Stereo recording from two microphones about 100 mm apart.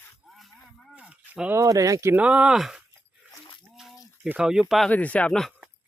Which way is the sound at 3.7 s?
Centre (ahead or behind).